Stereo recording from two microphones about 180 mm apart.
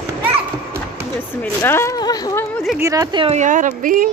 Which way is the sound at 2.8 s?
20° right (ahead or behind).